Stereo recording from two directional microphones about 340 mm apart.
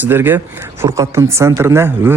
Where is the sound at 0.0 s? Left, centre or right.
Centre.